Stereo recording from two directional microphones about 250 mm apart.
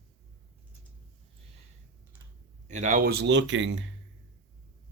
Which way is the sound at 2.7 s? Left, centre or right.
Right.